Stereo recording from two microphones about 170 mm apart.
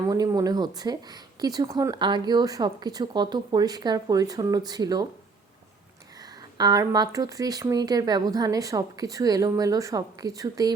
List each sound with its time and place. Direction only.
0.0 s speech: 20° right (ahead or behind)
6.6 s speech: 25° right (ahead or behind)